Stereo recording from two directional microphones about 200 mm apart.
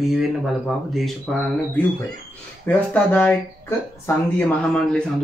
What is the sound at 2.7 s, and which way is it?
Speech, 10° left (ahead or behind).